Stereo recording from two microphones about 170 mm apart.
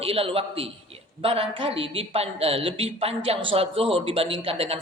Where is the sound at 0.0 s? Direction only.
35° right (ahead or behind).